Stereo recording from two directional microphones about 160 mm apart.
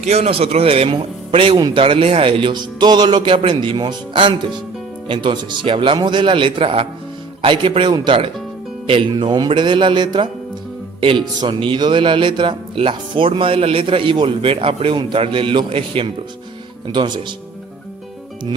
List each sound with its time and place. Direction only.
0.0 s speech: 40° right (ahead or behind)